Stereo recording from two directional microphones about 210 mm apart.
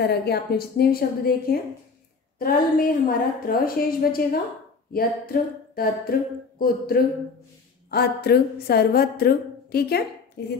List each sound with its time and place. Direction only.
0.0 s a woman's voice: 50° left (ahead or behind)